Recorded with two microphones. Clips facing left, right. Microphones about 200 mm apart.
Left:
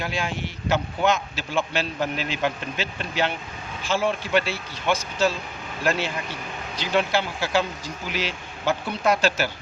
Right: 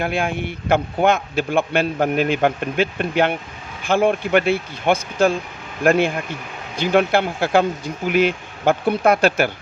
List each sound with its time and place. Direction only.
0.0 s a man's voice: 55° right (ahead or behind)